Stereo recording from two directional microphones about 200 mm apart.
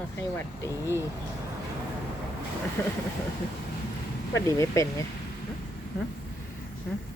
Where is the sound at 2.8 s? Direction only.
10° left (ahead or behind).